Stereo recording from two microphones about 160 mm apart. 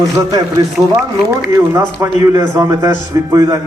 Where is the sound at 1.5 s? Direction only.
15° right (ahead or behind).